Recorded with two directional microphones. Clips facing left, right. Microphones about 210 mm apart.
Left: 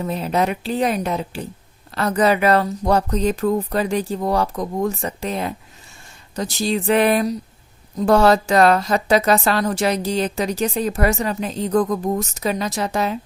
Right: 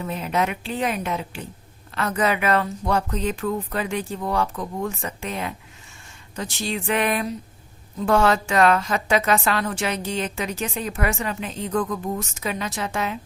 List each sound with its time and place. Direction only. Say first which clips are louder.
0.0 s a woman's voice: left 4 dB; 35° left (ahead or behind)